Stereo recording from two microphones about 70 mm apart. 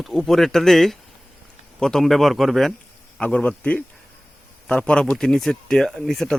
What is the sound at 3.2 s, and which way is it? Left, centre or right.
Speech, centre.